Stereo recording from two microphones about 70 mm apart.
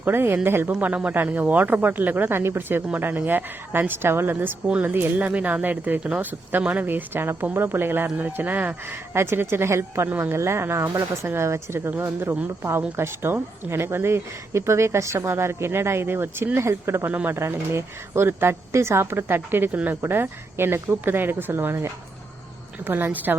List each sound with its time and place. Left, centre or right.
0.0 s a woman's voice: right
0.7 s a woman's voice: centre; by 17.1 s right
17.1 s speech: right
17.3 s a woman's voice: right